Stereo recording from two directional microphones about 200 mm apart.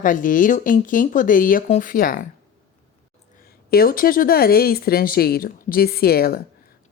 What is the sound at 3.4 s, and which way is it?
Speech, 50° left (ahead or behind).